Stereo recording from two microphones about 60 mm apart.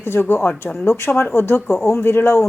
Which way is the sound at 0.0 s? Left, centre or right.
Left.